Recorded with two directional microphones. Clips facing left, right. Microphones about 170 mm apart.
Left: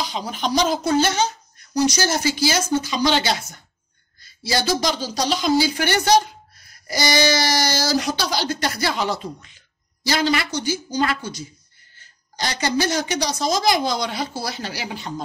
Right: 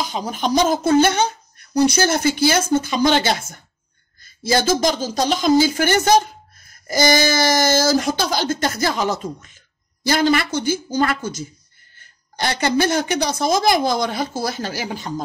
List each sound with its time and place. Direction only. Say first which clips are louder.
0.0 s a woman's voice: right 3 dB; 45° right (ahead or behind)